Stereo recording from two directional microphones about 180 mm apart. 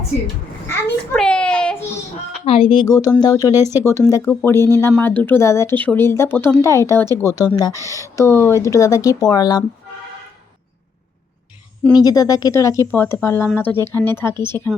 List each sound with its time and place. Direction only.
0.7 s a sound: 5° left (ahead or behind)
2.4 s speech: 30° left (ahead or behind)
11.9 s speech: 20° left (ahead or behind)